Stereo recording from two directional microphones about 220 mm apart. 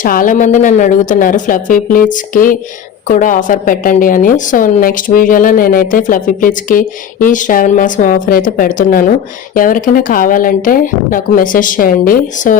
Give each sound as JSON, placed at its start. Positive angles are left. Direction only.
{"t": 0.0, "sound": "a woman's voice", "side_deg": 40}